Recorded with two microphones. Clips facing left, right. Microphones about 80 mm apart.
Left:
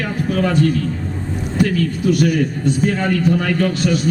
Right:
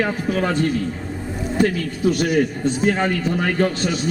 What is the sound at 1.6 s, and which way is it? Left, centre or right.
A man's voice, right.